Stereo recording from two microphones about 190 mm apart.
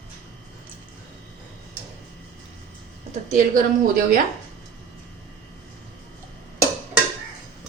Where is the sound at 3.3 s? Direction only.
45° right (ahead or behind).